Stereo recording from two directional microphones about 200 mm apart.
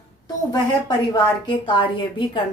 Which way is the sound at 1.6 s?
25° left (ahead or behind).